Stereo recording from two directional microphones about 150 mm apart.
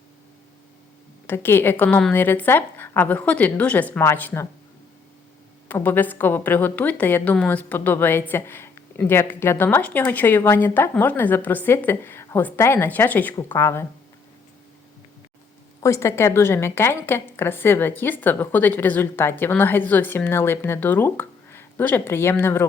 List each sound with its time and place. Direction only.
1.3 s a woman's voice: 15° left (ahead or behind)
5.6 s a woman's voice: 15° left (ahead or behind)
15.8 s a woman's voice: 20° left (ahead or behind)